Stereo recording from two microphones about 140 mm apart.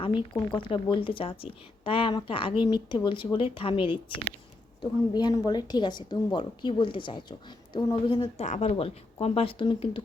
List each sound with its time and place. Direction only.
0.0 s a woman's voice: 35° left (ahead or behind)
4.8 s a woman's voice: 30° left (ahead or behind)
8.4 s speech: 50° left (ahead or behind)